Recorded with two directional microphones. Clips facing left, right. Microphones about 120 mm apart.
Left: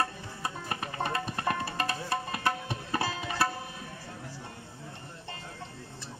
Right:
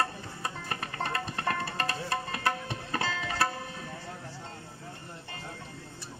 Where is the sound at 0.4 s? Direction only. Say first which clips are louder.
Left 1 dB; 10° left (ahead or behind).